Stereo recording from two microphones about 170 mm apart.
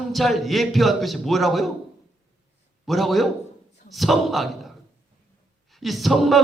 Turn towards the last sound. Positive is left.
turn(degrees=0)  # may be behind; listen again after turning